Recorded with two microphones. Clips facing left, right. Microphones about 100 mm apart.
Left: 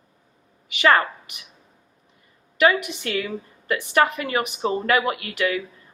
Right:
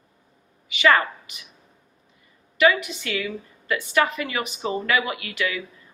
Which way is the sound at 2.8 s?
50° left (ahead or behind).